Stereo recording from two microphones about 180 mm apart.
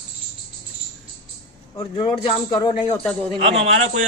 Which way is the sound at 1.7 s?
30° left (ahead or behind).